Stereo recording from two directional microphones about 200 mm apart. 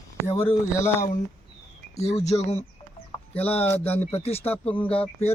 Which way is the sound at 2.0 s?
35° left (ahead or behind).